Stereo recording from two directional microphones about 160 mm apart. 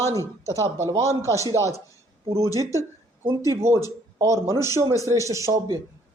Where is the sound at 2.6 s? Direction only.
20° right (ahead or behind).